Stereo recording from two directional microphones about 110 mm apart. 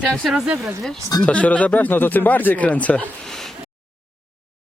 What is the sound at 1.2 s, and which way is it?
Speech, 10° left (ahead or behind).